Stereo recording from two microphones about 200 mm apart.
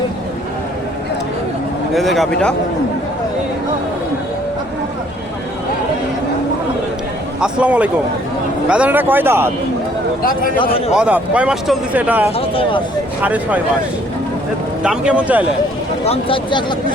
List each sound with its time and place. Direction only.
1.9 s speech: centre (ahead or behind)
7.4 s speech: 5° right (ahead or behind)
10.9 s speech: 5° right (ahead or behind)
12.4 s speech: 25° left (ahead or behind)
13.2 s speech: 10° right (ahead or behind)
14.8 s speech: 5° right (ahead or behind)
16.0 s speech: 25° left (ahead or behind)